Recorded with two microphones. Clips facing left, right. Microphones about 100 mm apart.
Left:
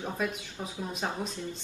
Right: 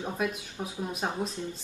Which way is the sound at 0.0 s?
15° right (ahead or behind).